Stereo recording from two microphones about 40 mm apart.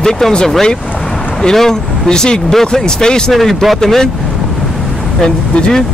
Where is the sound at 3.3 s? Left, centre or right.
Centre.